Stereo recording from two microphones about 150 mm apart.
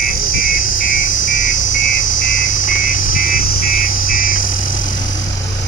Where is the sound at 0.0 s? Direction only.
75° left (ahead or behind).